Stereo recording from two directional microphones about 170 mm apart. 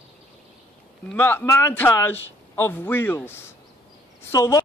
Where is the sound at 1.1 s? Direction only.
10° left (ahead or behind).